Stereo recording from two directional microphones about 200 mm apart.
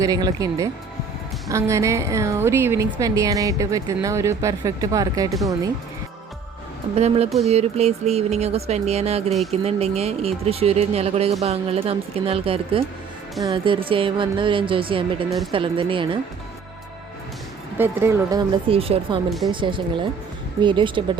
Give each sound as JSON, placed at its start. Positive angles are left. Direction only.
{"t": 0.0, "sound": "a woman's voice", "side_deg": -20}
{"t": 6.9, "sound": "a woman's voice", "side_deg": -30}
{"t": 17.7, "sound": "a woman's voice", "side_deg": -10}